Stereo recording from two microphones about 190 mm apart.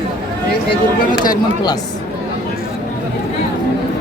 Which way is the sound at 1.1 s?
20° left (ahead or behind).